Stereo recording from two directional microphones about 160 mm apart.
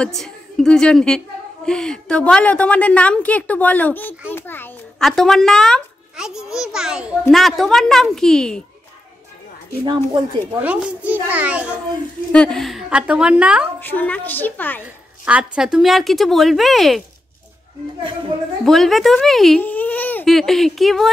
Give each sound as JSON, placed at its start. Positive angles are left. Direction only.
{"t": 0.0, "sound": "a child's voice", "side_deg": 5}
{"t": 9.8, "sound": "speech", "side_deg": -30}
{"t": 10.6, "sound": "a child's voice", "side_deg": -10}
{"t": 12.3, "sound": "a child's voice", "side_deg": 5}
{"t": 13.7, "sound": "a woman's voice", "side_deg": 10}
{"t": 15.2, "sound": "a child's voice", "side_deg": -5}
{"t": 18.7, "sound": "a child's voice", "side_deg": 0}